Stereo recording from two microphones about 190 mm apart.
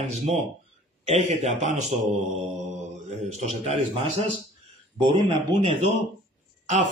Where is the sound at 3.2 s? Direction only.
35° right (ahead or behind).